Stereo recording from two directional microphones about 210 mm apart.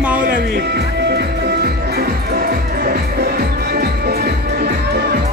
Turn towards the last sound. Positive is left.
turn(degrees=-50)  # may be behind; listen again after turning